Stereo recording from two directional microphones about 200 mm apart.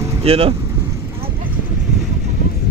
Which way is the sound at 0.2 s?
30° right (ahead or behind).